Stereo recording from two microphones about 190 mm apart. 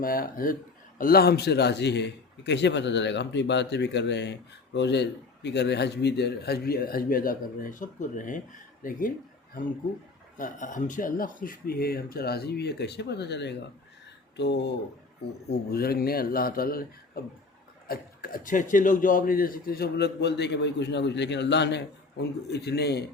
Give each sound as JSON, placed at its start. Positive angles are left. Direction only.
{"t": 0.0, "sound": "a man's voice", "side_deg": 50}
{"t": 10.3, "sound": "a man's voice", "side_deg": 45}